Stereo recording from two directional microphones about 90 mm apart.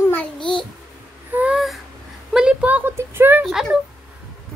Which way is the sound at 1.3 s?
15° right (ahead or behind).